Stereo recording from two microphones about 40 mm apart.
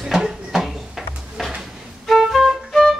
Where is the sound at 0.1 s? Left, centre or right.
Centre.